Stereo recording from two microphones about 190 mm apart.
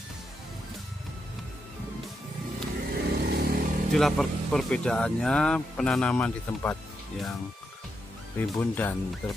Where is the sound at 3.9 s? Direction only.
Centre (ahead or behind).